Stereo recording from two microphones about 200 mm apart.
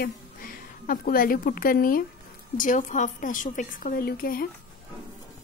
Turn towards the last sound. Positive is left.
turn(degrees=45)  # may be behind; listen again after turning